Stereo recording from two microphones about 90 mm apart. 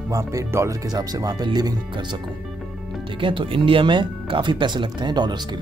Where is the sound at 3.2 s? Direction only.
70° right (ahead or behind); by 5.4 s 55° right (ahead or behind).